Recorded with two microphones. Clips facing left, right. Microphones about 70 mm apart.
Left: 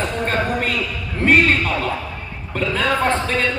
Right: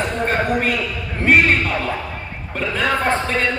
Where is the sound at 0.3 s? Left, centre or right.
Centre.